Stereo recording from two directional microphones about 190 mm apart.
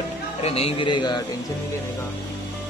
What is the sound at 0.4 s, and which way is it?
Speech, 30° left (ahead or behind).